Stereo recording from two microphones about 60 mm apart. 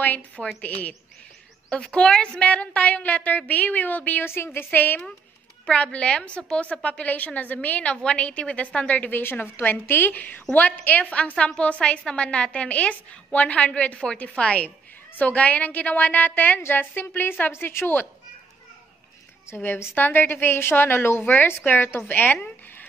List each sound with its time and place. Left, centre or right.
0.0 s a woman's voice: left
1.7 s a woman's voice: centre; by 5.0 s left
5.7 s a woman's voice: centre
9.2 s a woman's voice: left
19.5 s a woman's voice: left